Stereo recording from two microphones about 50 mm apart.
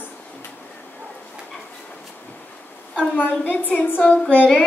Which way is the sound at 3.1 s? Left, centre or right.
Left.